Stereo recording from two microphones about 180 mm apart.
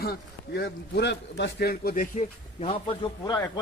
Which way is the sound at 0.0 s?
60° left (ahead or behind).